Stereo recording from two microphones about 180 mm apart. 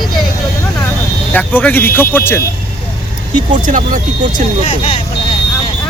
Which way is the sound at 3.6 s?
45° right (ahead or behind).